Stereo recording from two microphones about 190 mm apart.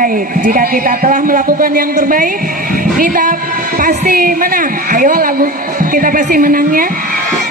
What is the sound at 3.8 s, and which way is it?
A woman's voice, 50° right (ahead or behind).